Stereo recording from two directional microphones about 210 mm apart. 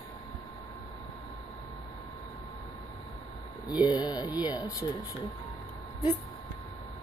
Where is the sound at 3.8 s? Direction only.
20° left (ahead or behind).